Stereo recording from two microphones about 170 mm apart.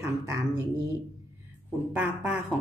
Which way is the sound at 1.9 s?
10° right (ahead or behind).